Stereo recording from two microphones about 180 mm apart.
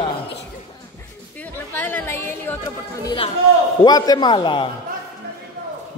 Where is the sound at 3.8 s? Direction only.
20° left (ahead or behind).